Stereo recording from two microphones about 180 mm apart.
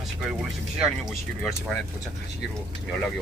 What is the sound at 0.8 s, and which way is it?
Speech, centre (ahead or behind).